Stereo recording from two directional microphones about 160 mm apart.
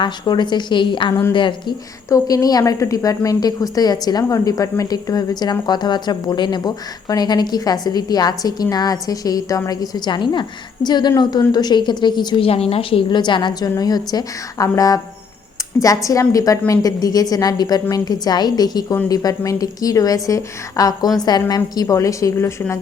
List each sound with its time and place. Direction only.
0.0 s a woman's voice: 30° left (ahead or behind)
16.0 s a woman's voice: 20° left (ahead or behind)